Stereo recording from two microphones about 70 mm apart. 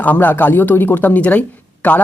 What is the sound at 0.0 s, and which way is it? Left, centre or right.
Speech, left.